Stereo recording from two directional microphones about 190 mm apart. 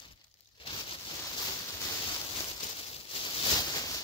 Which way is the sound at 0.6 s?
30° left (ahead or behind).